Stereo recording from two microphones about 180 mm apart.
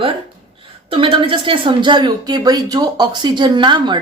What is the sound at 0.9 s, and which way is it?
Speech, 30° right (ahead or behind).